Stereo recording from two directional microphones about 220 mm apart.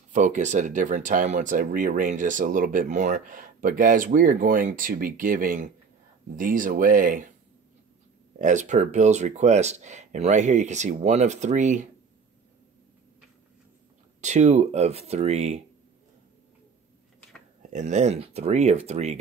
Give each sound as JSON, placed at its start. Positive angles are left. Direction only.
{"t": 0.1, "sound": "speech", "side_deg": -35}
{"t": 8.4, "sound": "speech", "side_deg": -35}
{"t": 14.2, "sound": "speech", "side_deg": -30}
{"t": 17.6, "sound": "speech", "side_deg": -30}